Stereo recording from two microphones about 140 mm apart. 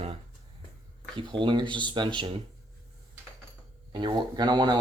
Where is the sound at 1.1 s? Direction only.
35° right (ahead or behind).